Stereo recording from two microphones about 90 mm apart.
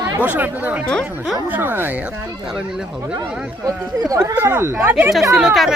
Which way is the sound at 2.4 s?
5° right (ahead or behind).